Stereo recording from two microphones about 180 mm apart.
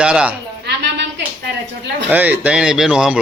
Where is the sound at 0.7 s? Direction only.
65° right (ahead or behind).